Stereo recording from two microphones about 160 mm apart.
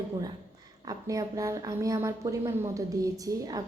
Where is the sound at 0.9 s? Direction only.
20° right (ahead or behind).